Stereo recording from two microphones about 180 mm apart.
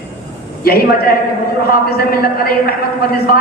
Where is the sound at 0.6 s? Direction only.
60° left (ahead or behind).